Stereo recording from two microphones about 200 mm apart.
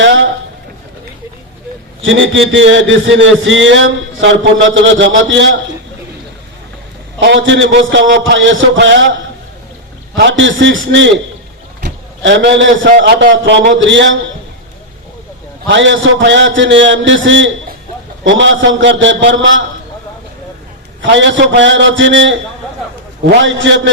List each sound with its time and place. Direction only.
0.0 s a sound: 65° right (ahead or behind)
2.0 s a man's voice: 70° right (ahead or behind)
7.2 s a man's voice: 65° right (ahead or behind)
10.2 s a man's voice: 65° right (ahead or behind)
15.6 s a man's voice: 70° right (ahead or behind)
21.0 s a man's voice: 65° right (ahead or behind)
23.4 s a man's voice: 70° right (ahead or behind)